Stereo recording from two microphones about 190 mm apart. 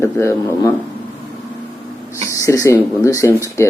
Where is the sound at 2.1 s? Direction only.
15° left (ahead or behind).